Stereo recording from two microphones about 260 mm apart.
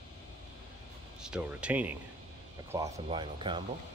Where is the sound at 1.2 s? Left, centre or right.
Centre.